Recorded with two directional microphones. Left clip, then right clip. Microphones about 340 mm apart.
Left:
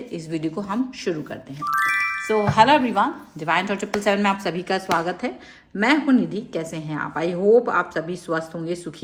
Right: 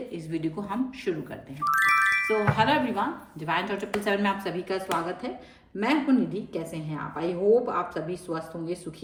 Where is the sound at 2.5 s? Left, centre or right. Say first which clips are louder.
Left 8 dB; centre.